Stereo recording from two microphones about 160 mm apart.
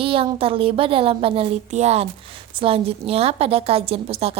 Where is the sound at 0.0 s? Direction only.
35° right (ahead or behind).